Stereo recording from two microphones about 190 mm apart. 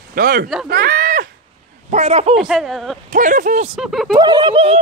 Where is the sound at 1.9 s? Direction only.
35° right (ahead or behind).